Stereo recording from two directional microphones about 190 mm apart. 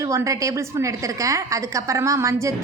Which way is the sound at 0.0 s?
15° right (ahead or behind).